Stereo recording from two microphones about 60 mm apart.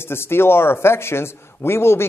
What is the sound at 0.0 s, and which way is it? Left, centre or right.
Speech, left.